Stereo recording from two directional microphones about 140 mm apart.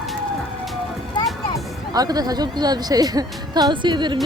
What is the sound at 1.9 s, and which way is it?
A woman's voice, 30° right (ahead or behind).